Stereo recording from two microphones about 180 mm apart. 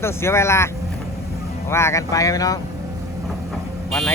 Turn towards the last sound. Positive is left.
turn(degrees=0)  # may be behind; listen again after turning